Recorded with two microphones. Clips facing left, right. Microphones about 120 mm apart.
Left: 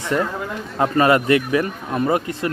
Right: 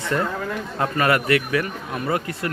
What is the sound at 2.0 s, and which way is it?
Speech, 20° left (ahead or behind).